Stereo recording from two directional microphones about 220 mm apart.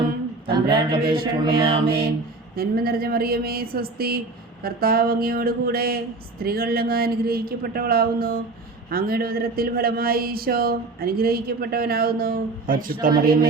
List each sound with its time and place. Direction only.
0.4 s speech: 20° right (ahead or behind)
1.5 s mantra: 20° right (ahead or behind)
2.6 s speech: 45° right (ahead or behind)